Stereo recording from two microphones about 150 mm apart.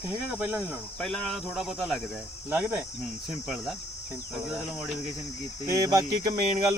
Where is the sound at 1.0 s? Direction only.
5° left (ahead or behind).